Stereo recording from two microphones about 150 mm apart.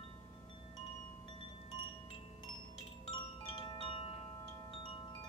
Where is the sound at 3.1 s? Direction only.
30° left (ahead or behind).